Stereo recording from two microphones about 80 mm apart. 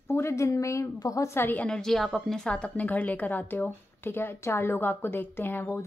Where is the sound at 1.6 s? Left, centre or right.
Centre.